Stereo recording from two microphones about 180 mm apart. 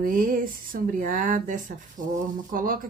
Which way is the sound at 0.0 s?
50° right (ahead or behind).